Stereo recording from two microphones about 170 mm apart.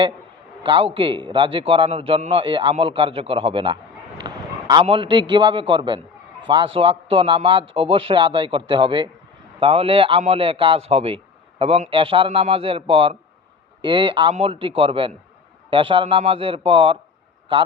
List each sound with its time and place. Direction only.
0.6 s a man's voice: 30° right (ahead or behind)
4.2 s a sound: 25° right (ahead or behind)
5.3 s a man's voice: 25° right (ahead or behind)